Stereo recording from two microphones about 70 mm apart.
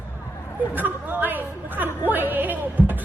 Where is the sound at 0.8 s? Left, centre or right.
Right.